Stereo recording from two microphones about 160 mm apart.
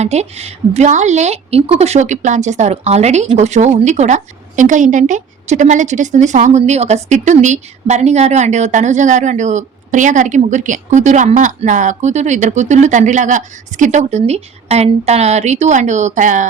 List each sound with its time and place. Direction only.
0.0 s a woman's voice: 45° right (ahead or behind)